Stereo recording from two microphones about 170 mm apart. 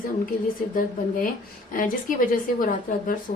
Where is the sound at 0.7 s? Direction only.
55° left (ahead or behind).